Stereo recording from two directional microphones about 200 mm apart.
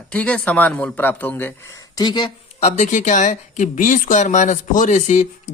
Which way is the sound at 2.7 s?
35° left (ahead or behind).